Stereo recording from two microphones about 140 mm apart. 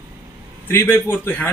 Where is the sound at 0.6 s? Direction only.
15° left (ahead or behind).